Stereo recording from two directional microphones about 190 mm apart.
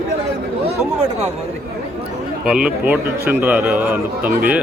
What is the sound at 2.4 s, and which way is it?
A man's voice, 5° right (ahead or behind).